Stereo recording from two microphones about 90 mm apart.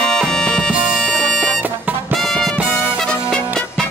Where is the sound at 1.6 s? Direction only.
20° right (ahead or behind).